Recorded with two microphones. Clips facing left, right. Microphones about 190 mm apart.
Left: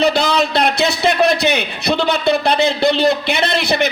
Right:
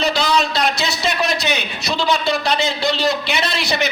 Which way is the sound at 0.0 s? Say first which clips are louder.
Left 3 dB; 55° left (ahead or behind).